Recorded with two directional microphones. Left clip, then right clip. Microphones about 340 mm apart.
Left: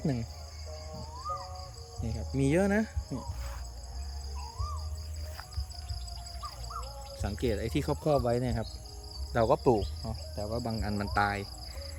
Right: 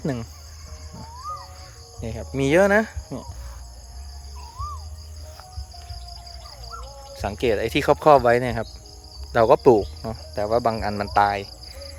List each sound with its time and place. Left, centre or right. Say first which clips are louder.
0.0 s speech: right 7 dB; centre
2.0 s speech: right 8 dB; centre
7.2 s speech: right 11 dB; centre
9.4 s speech: right 11 dB; right
10.7 s speech: right 12 dB; centre